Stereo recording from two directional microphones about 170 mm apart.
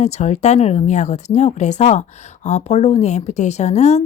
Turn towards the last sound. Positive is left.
turn(degrees=40)  # may be behind; listen again after turning